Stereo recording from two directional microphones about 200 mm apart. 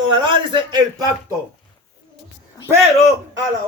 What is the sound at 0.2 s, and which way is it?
Speech, 25° right (ahead or behind).